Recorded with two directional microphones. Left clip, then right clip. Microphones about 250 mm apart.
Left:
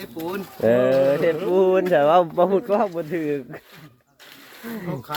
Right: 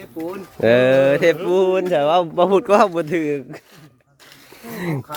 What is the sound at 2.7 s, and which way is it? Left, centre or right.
Speech, right.